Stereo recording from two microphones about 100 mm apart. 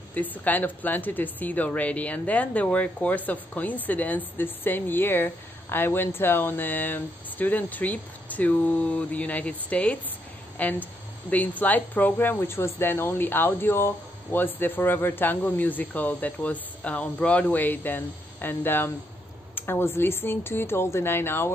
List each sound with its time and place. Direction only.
0.1 s a woman's voice: 15° left (ahead or behind)
19.5 s a sound: 20° left (ahead or behind)
20.0 s speech: 25° left (ahead or behind)